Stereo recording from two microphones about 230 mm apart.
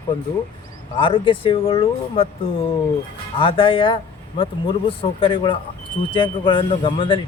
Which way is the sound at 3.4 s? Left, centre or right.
Left.